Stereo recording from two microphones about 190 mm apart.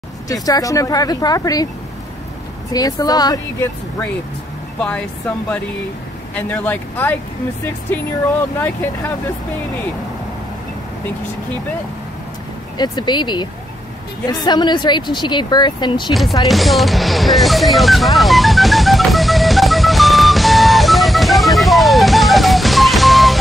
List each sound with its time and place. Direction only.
0.3 s speech: 20° left (ahead or behind)
2.7 s speech: 20° left (ahead or behind)
4.7 s chopping: 5° left (ahead or behind)
6.3 s speech: 10° left (ahead or behind)
12.7 s speech: 20° left (ahead or behind)
16.1 s chopping: centre (ahead or behind)
16.4 s music: centre (ahead or behind)